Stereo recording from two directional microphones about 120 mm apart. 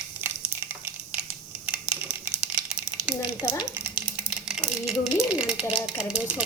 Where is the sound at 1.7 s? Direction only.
10° right (ahead or behind).